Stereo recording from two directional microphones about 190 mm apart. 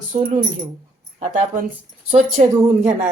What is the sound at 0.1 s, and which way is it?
Speech, 35° right (ahead or behind).